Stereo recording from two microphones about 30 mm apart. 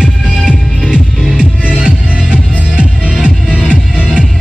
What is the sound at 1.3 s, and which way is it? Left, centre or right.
Music, right.